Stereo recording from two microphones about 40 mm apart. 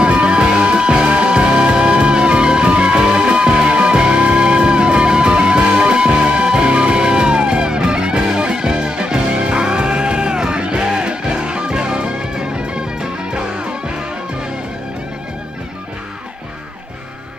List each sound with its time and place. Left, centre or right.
0.0 s music: right